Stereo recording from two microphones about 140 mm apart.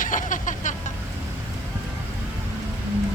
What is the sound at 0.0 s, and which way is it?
Vehicle, 70° left (ahead or behind).